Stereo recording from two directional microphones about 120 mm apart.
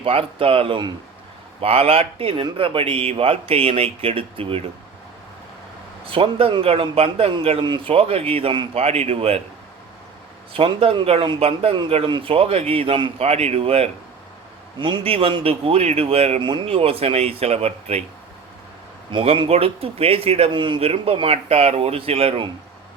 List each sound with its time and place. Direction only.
0.0 s speech: 50° right (ahead or behind)
6.1 s a man's voice: 45° right (ahead or behind)
10.5 s a man's voice: 50° right (ahead or behind)
14.8 s speech: 45° right (ahead or behind); by 16.4 s 60° right (ahead or behind)
16.4 s a man's voice: 40° right (ahead or behind); by 18.0 s 60° right (ahead or behind)
19.1 s speech: 50° right (ahead or behind)